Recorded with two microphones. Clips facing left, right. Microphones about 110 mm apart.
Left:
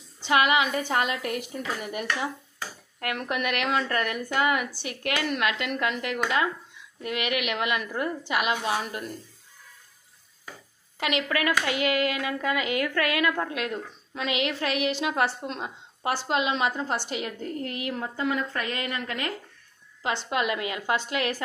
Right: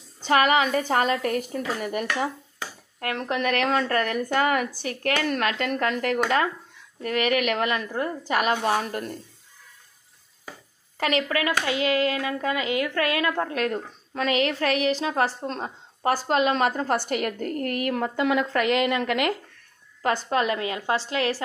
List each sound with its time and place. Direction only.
0.2 s speech: 40° right (ahead or behind)
3.0 s speech: 30° right (ahead or behind)
11.0 s speech: 40° right (ahead or behind); by 19.3 s 85° right
20.0 s speech: 45° right (ahead or behind)